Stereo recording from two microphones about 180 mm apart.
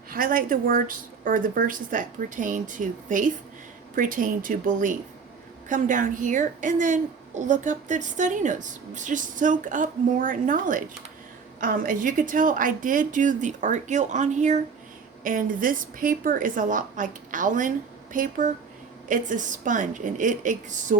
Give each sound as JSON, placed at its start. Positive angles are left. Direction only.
{"t": 0.1, "sound": "a woman's voice", "side_deg": -50}